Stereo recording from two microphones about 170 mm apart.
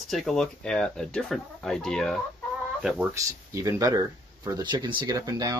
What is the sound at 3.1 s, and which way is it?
Speech, 20° right (ahead or behind).